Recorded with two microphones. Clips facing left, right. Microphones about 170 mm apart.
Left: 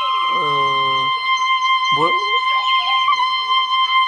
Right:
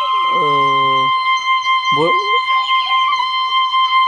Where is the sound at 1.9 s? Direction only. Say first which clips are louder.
Right 7 dB; 35° right (ahead or behind).